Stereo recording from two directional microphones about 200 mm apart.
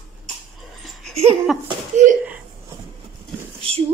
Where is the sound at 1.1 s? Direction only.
30° right (ahead or behind).